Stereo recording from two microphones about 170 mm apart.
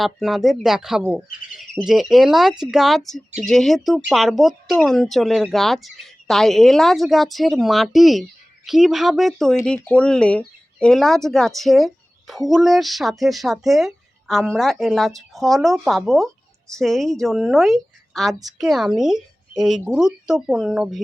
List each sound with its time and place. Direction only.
0.0 s a woman's voice: centre (ahead or behind)